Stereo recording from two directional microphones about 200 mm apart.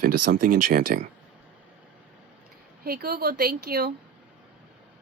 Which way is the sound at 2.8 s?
50° right (ahead or behind).